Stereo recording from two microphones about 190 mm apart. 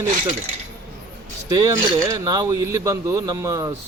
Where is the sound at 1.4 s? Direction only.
20° right (ahead or behind).